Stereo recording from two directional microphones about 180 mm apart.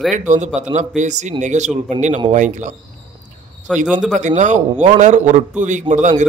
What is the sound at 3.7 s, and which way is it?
Speech, centre (ahead or behind).